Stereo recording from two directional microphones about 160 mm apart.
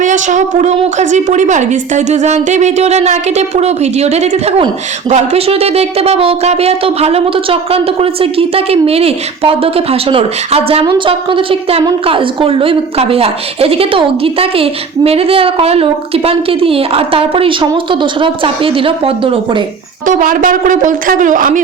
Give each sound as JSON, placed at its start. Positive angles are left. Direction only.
{"t": 0.0, "sound": "a woman's voice", "side_deg": -50}
{"t": 20.1, "sound": "speech", "side_deg": -60}